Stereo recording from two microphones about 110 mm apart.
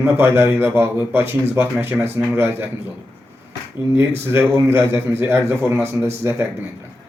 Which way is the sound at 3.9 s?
20° right (ahead or behind).